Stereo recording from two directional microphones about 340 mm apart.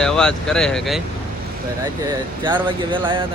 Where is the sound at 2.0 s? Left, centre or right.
Centre.